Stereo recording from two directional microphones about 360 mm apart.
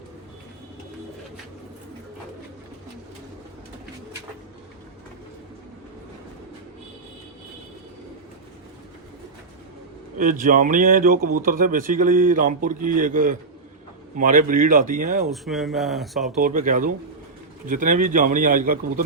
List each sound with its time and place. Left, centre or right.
10.2 s speech: right
15.3 s speech: centre
16.4 s speech: right